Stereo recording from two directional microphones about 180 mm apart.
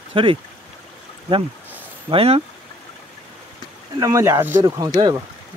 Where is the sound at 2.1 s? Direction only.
35° right (ahead or behind).